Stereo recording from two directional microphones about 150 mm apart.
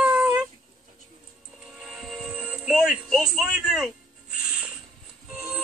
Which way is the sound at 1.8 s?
Centre (ahead or behind).